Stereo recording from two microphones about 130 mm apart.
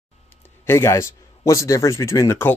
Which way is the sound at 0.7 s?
20° left (ahead or behind).